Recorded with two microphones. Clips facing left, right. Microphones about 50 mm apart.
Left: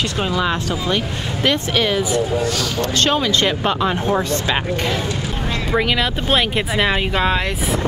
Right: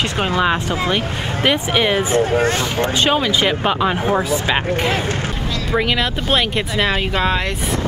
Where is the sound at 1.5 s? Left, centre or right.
Centre.